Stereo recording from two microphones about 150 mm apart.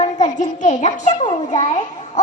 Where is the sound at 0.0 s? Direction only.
50° left (ahead or behind).